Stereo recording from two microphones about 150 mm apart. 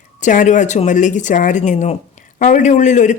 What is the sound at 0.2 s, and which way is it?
A man's voice, 55° left (ahead or behind).